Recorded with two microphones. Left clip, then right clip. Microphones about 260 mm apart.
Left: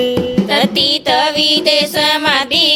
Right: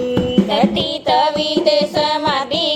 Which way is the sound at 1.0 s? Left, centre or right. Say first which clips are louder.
Left 2 dB; left.